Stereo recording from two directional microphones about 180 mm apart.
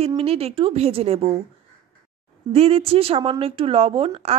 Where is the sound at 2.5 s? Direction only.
30° right (ahead or behind).